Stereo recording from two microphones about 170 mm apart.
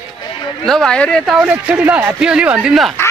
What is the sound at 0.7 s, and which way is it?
Speech, 5° left (ahead or behind).